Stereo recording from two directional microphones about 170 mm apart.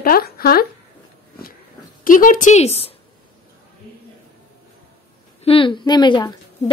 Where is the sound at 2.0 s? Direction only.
55° left (ahead or behind); by 2.9 s 35° left (ahead or behind).